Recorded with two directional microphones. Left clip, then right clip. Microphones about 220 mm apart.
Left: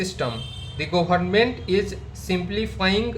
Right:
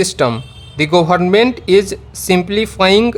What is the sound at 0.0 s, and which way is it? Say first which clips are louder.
Speech: right 12 dB; 55° right (ahead or behind).